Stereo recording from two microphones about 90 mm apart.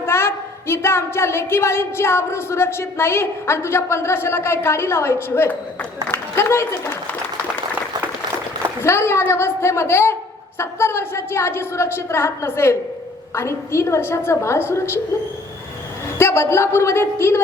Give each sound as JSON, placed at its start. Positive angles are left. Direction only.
{"t": 0.0, "sound": "a woman's voice", "side_deg": 30}
{"t": 8.8, "sound": "a woman's voice", "side_deg": 30}
{"t": 16.1, "sound": "a woman's voice", "side_deg": 30}